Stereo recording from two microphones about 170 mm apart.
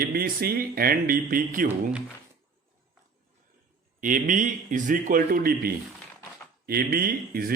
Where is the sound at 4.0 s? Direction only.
50° right (ahead or behind).